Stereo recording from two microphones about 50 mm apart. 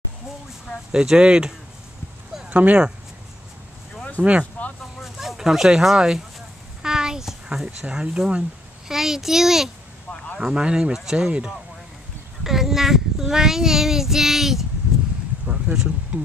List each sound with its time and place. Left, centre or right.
0.9 s a child's voice: centre
2.5 s speech: right
4.2 s speech: right
5.0 s speech: centre
6.8 s a sound: centre
7.6 s a child's voice: centre
10.4 s a child's voice: centre
12.4 s child singing: centre
15.4 s insect: centre
16.1 s speech: right